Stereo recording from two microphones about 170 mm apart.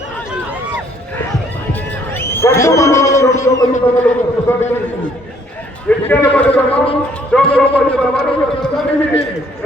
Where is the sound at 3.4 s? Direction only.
20° left (ahead or behind).